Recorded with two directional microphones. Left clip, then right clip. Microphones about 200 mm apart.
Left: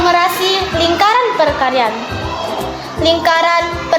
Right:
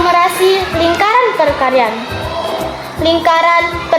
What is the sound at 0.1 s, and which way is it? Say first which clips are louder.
Children playing: right 2 dB; 10° right (ahead or behind).